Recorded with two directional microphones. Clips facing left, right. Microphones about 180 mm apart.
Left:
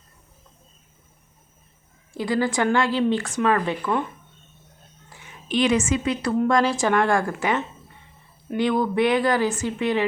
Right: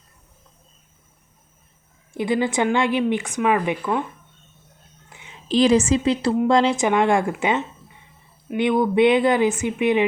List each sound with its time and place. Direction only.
2.1 s speech: 20° right (ahead or behind)
5.0 s a sound: 20° right (ahead or behind)
5.5 s a woman's voice: 35° right (ahead or behind)